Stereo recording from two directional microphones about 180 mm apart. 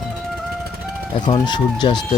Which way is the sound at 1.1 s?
25° left (ahead or behind).